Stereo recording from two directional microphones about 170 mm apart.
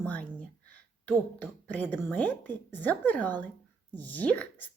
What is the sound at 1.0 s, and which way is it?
A woman's voice, 10° left (ahead or behind).